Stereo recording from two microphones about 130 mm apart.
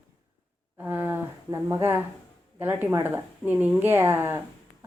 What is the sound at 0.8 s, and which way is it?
Speech, 15° right (ahead or behind).